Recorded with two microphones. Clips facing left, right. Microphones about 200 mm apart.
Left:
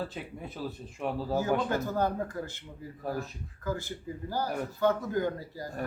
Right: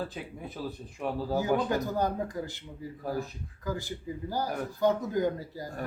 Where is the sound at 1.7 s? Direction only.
15° right (ahead or behind).